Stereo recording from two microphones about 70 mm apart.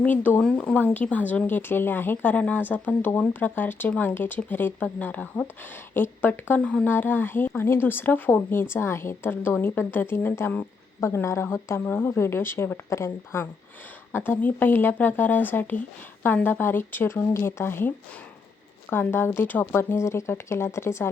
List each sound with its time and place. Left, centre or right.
0.0 s speech: left
0.4 s a woman's voice: centre; by 21.1 s left